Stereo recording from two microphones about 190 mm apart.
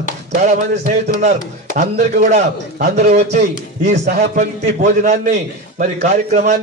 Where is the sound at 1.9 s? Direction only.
55° right (ahead or behind).